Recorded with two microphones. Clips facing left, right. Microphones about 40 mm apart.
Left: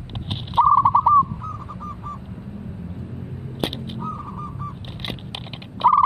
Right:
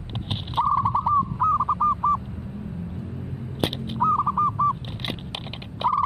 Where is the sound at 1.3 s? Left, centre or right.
Right.